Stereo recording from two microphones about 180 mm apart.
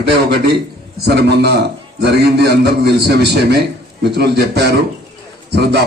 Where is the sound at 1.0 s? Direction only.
65° right (ahead or behind).